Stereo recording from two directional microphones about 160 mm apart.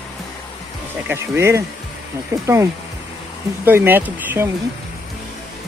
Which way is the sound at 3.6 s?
10° right (ahead or behind).